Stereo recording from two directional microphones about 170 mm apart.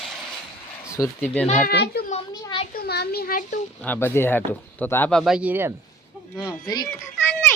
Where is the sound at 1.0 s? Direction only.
15° left (ahead or behind).